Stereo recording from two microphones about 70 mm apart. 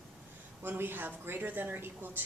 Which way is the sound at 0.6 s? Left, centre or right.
Right.